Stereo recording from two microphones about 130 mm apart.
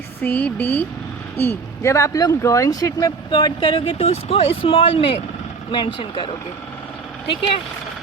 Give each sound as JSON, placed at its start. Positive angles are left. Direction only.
{"t": 0.2, "sound": "speech", "side_deg": 15}
{"t": 3.3, "sound": "speech", "side_deg": 40}